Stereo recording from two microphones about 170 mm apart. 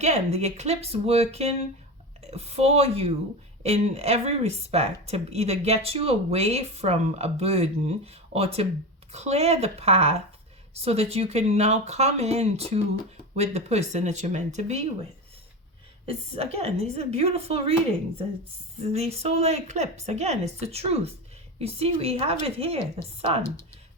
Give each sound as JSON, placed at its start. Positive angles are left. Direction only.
{"t": 0.0, "sound": "speech", "side_deg": -40}
{"t": 16.0, "sound": "speech", "side_deg": -35}
{"t": 18.8, "sound": "speech", "side_deg": -35}